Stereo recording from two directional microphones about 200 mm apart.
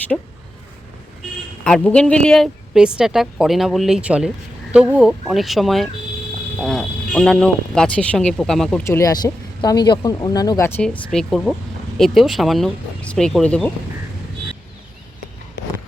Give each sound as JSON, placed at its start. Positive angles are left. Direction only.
{"t": 1.6, "sound": "speech", "side_deg": 5}
{"t": 8.9, "sound": "speech", "side_deg": 15}